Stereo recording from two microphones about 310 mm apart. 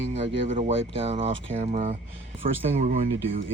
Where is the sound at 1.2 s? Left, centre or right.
Right.